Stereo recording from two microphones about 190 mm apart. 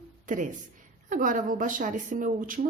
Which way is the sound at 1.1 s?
45° right (ahead or behind).